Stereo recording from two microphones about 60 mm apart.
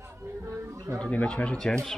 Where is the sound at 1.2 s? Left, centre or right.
Centre.